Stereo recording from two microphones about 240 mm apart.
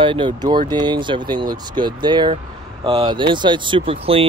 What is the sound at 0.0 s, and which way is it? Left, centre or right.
Speech, right.